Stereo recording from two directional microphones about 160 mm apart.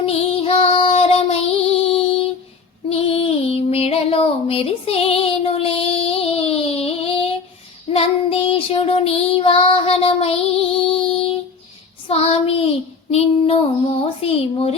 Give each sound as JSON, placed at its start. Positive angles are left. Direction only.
{"t": 0.0, "sound": "child singing", "side_deg": 40}
{"t": 1.9, "sound": "music", "side_deg": 35}
{"t": 2.9, "sound": "female singing", "side_deg": 40}
{"t": 7.9, "sound": "child singing", "side_deg": 35}
{"t": 13.1, "sound": "speech", "side_deg": 40}